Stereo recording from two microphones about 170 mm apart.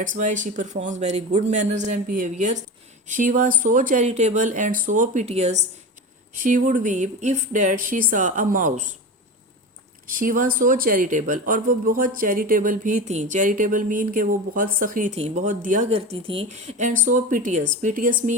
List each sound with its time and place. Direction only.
0.0 s speech: 50° right (ahead or behind)
6.3 s speech: 50° right (ahead or behind)
10.1 s speech: 55° right (ahead or behind)